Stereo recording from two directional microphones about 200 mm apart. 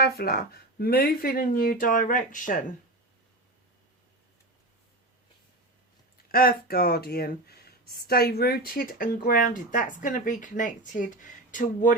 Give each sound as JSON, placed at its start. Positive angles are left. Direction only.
{"t": 0.0, "sound": "speech", "side_deg": 50}
{"t": 6.3, "sound": "speech", "side_deg": 50}